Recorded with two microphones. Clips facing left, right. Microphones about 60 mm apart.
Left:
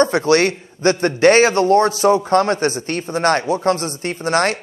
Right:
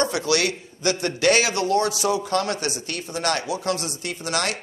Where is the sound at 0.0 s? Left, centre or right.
Left.